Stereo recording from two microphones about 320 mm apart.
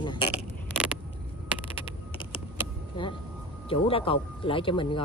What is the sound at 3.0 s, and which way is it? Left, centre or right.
Speech, centre.